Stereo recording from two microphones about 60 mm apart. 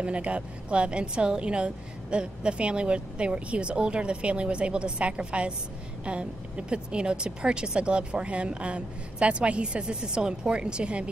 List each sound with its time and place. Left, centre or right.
0.0 s a woman's voice: right